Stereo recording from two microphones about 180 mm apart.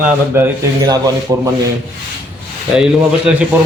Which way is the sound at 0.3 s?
15° right (ahead or behind).